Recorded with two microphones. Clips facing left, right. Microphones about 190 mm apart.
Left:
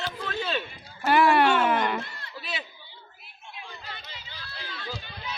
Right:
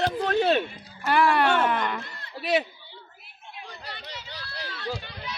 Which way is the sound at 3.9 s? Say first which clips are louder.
Right 5 dB; 75° right (ahead or behind).